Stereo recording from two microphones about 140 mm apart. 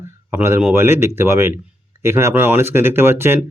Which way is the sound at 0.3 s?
15° right (ahead or behind).